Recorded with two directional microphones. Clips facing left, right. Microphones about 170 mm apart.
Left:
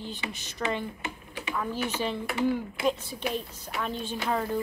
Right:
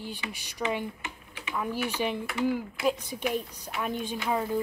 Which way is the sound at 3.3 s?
10° right (ahead or behind).